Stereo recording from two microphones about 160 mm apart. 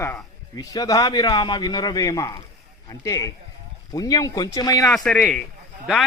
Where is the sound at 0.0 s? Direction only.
20° left (ahead or behind).